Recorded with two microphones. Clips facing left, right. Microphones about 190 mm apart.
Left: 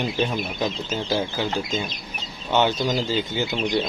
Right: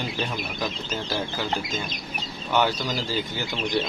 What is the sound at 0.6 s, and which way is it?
Speech, 20° left (ahead or behind).